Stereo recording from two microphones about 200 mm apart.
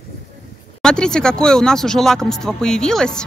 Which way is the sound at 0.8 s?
5° left (ahead or behind).